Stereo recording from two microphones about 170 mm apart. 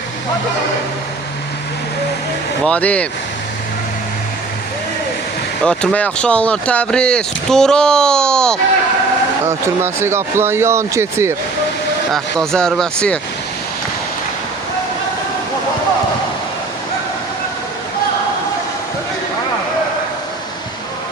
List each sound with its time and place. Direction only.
2.6 s speech: 10° left (ahead or behind)
5.6 s speech: 5° left (ahead or behind)
9.5 s speech: 15° right (ahead or behind)
12.1 s speech: 5° left (ahead or behind)